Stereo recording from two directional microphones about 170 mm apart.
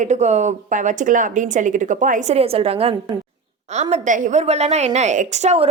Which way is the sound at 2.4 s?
35° right (ahead or behind).